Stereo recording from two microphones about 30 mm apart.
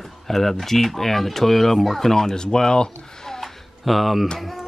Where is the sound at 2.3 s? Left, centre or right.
Left.